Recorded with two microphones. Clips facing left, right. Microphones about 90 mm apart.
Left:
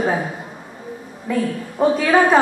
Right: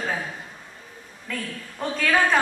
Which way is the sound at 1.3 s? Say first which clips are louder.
Left 12 dB; 25° left (ahead or behind).